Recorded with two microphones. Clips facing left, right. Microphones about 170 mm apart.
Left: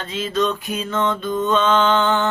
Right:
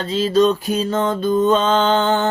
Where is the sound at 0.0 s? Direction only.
35° right (ahead or behind).